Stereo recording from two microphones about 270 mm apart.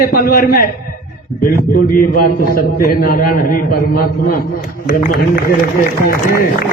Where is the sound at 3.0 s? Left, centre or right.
Left.